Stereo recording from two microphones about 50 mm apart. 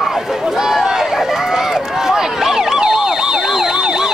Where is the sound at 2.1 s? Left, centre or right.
Centre.